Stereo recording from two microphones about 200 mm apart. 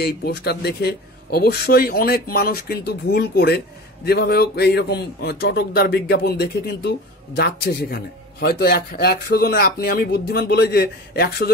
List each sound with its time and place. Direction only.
0.0 s speech: 55° left (ahead or behind)